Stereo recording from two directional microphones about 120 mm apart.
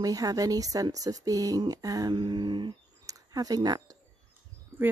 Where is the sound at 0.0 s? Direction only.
30° right (ahead or behind).